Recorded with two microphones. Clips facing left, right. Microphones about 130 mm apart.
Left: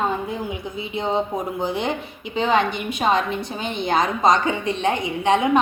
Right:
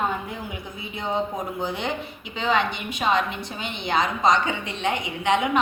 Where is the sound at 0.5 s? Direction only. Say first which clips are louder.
Left 7 dB; 25° left (ahead or behind).